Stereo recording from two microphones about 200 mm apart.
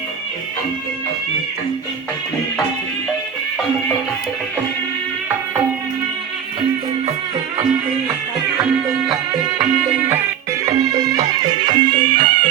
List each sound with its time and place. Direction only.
8.5 s music: 15° right (ahead or behind)
10.7 s music: 35° right (ahead or behind)
11.3 s music: 20° right (ahead or behind)